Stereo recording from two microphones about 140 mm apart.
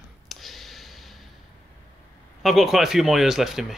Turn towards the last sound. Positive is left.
turn(degrees=0)  # may be behind; listen again after turning